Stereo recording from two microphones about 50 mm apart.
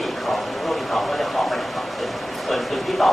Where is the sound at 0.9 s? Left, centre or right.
Centre.